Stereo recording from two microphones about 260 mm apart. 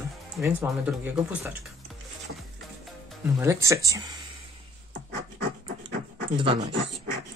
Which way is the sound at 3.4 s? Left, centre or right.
Centre.